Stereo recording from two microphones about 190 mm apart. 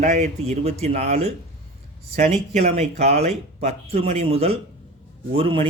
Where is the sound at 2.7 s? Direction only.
35° right (ahead or behind).